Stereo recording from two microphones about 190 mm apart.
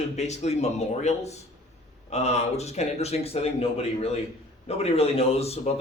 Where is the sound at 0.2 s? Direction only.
35° left (ahead or behind).